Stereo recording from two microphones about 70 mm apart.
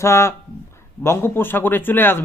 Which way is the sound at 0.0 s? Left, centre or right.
Left.